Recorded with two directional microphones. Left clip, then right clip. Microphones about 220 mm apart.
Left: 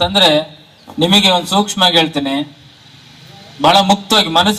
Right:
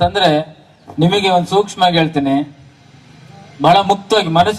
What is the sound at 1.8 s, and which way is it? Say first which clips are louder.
Speech: left 4 dB; 40° left (ahead or behind).